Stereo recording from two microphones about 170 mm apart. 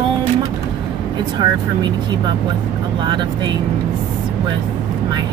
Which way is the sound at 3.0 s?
25° right (ahead or behind).